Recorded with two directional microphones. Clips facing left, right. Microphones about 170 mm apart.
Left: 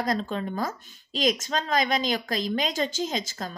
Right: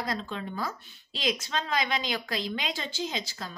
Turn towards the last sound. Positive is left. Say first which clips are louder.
# left 4 dB
turn(degrees=45)  # may be behind; listen again after turning